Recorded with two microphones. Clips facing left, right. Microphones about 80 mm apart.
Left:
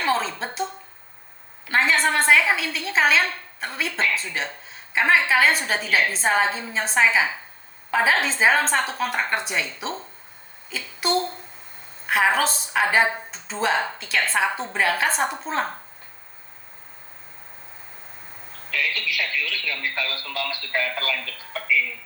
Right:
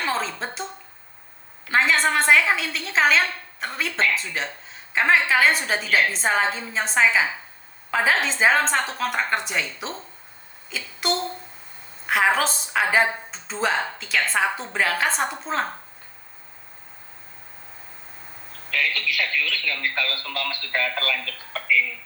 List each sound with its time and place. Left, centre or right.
0.0 s a woman's voice: centre
1.7 s a woman's voice: centre
18.7 s speech: right